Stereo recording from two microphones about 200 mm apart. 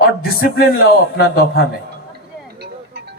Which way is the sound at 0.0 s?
50° left (ahead or behind).